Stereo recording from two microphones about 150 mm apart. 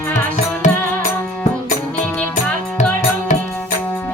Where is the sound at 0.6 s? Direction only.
55° left (ahead or behind).